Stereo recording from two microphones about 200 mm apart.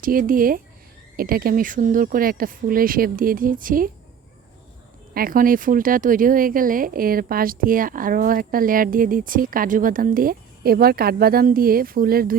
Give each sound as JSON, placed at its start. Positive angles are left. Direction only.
{"t": 0.0, "sound": "speech", "side_deg": -45}
{"t": 5.1, "sound": "speech", "side_deg": -45}